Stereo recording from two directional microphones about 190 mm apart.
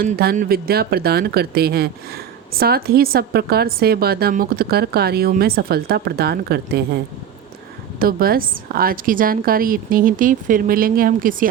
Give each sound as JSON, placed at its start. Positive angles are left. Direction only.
{"t": 0.0, "sound": "a woman's voice", "side_deg": -50}